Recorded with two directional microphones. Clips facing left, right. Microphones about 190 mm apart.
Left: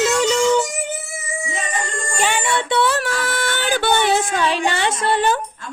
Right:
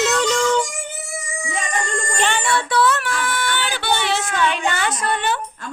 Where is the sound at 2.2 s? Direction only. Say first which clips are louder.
Left 1 dB; 10° left (ahead or behind).